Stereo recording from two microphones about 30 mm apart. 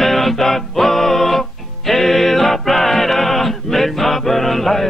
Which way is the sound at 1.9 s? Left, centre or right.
Centre.